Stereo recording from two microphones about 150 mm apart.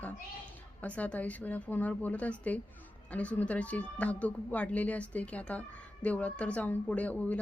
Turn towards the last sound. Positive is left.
turn(degrees=10)  # may be behind; listen again after turning